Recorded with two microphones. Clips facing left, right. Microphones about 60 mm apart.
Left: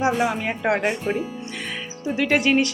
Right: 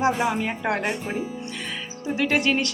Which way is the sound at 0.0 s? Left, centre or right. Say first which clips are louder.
Left 1 dB; centre.